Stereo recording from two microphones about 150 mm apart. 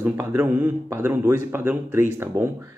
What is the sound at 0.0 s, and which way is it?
Speech, 15° right (ahead or behind).